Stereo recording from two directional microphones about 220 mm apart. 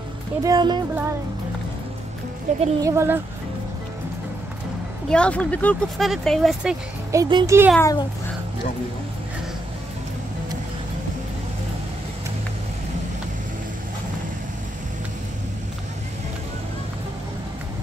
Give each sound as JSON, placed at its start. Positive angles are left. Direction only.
{"t": 0.4, "sound": "speech", "side_deg": -20}
{"t": 2.5, "sound": "speech", "side_deg": -30}
{"t": 2.8, "sound": "speech", "side_deg": -10}
{"t": 5.1, "sound": "speech", "side_deg": 5}
{"t": 7.1, "sound": "speech", "side_deg": -15}
{"t": 7.7, "sound": "a child's voice", "side_deg": 15}